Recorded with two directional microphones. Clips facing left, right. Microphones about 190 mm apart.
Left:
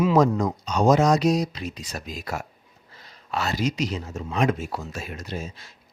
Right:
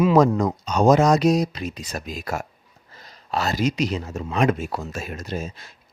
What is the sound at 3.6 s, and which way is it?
Speech, 65° right (ahead or behind).